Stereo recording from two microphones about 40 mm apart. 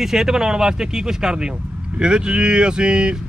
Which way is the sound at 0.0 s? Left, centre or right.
Centre.